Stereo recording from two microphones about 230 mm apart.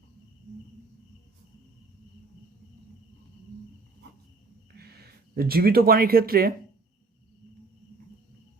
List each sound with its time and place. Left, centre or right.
4.7 s speech: right